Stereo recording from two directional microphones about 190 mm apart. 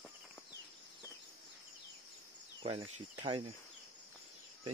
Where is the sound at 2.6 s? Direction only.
25° right (ahead or behind).